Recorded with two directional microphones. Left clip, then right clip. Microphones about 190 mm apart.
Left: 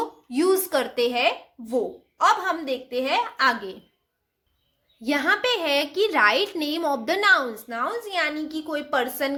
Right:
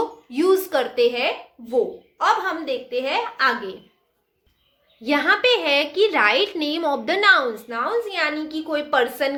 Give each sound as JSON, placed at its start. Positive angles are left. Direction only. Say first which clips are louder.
{"t": 0.0, "sound": "speech", "louder": "right 2 dB", "side_deg": 35}
{"t": 5.0, "sound": "a woman's voice", "louder": "right 4 dB", "side_deg": 30}